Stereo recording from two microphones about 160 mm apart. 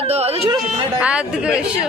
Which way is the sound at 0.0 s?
40° right (ahead or behind).